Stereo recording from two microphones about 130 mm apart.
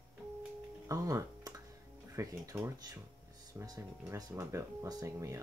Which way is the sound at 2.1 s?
25° right (ahead or behind).